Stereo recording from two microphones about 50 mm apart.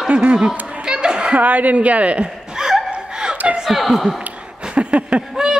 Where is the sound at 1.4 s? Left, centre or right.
Right.